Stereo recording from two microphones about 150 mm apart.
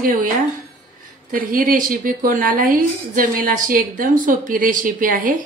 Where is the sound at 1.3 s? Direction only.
70° right (ahead or behind).